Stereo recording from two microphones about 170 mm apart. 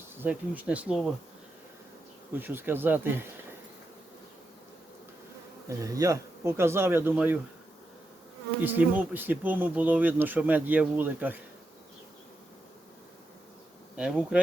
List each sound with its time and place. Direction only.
0.2 s speech: 10° right (ahead or behind)
2.3 s speech: 10° right (ahead or behind)
5.6 s speech: 20° right (ahead or behind)
8.6 s speech: 10° right (ahead or behind)
13.9 s bee: 5° right (ahead or behind)